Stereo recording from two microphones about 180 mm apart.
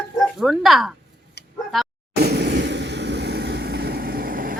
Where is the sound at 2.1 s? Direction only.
65° right (ahead or behind).